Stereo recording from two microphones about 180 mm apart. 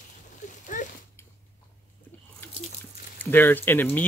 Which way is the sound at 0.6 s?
45° left (ahead or behind).